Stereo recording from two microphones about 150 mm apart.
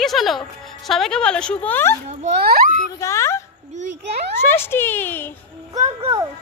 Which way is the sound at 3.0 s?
20° left (ahead or behind).